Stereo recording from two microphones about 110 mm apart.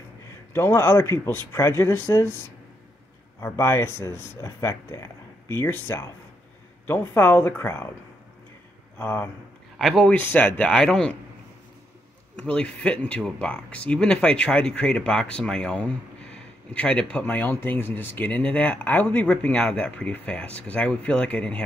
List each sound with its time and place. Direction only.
0.5 s speech: 20° left (ahead or behind)
3.3 s speech: 25° left (ahead or behind)
8.9 s speech: 20° left (ahead or behind)
9.8 s speech: 5° left (ahead or behind)
10.1 s speech: 20° left (ahead or behind)
10.7 s speech: 5° left (ahead or behind)
12.4 s speech: 10° left (ahead or behind)